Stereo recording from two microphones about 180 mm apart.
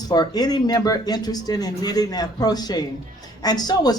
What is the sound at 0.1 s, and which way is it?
Speech, 20° left (ahead or behind).